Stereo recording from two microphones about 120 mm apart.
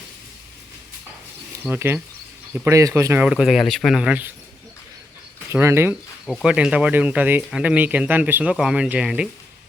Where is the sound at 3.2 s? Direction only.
5° right (ahead or behind).